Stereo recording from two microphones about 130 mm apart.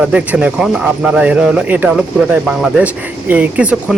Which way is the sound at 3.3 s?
10° right (ahead or behind).